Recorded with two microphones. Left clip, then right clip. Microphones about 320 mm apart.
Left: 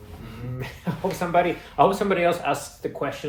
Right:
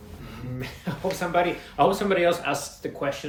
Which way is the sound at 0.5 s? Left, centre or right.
Centre.